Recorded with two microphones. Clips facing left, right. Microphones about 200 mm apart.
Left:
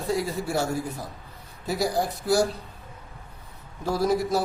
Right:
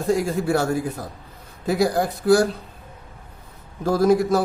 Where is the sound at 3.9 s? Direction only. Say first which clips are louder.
Right 6 dB; 50° right (ahead or behind).